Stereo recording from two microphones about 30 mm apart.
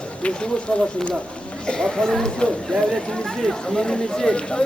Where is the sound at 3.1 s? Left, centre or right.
Centre; by 4.6 s left.